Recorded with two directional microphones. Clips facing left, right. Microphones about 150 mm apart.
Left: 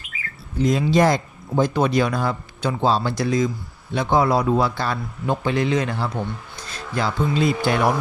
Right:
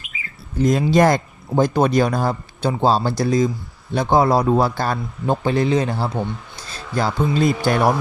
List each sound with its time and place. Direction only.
0.6 s speech: 45° right (ahead or behind)